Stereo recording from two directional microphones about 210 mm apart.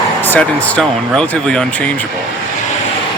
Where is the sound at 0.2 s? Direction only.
10° left (ahead or behind).